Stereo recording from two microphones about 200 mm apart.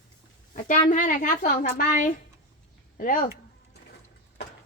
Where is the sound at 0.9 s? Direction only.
40° left (ahead or behind).